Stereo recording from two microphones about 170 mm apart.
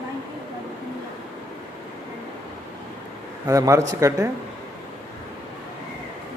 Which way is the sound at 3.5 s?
20° right (ahead or behind).